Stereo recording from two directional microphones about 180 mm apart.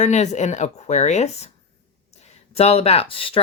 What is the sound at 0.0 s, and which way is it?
Speech, 40° left (ahead or behind).